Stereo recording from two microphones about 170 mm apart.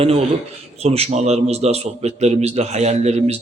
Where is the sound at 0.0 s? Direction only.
35° right (ahead or behind).